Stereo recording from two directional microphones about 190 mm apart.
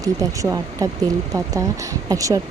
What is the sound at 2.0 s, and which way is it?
Speech, 20° right (ahead or behind).